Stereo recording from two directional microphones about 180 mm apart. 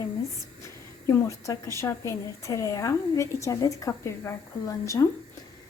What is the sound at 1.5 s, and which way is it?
A woman's voice, 15° left (ahead or behind).